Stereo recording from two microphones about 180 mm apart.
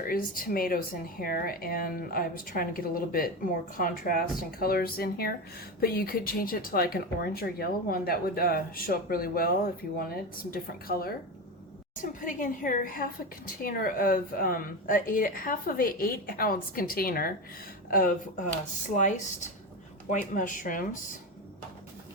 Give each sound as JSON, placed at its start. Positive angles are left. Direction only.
{"t": 0.0, "sound": "a woman's voice", "side_deg": 55}